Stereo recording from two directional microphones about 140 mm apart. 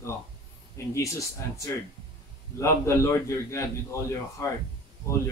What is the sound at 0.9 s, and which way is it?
Speech, 20° left (ahead or behind).